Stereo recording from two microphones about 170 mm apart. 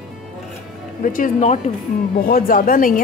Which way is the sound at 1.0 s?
50° left (ahead or behind).